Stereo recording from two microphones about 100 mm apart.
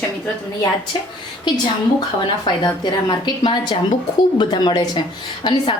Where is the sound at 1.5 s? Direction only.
50° left (ahead or behind).